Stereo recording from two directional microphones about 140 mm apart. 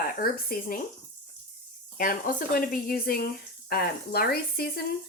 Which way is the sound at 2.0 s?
80° left.